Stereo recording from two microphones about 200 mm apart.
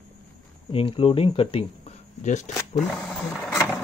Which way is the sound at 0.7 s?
30° left (ahead or behind).